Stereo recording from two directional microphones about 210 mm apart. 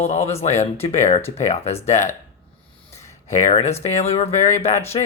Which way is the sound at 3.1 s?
35° left (ahead or behind).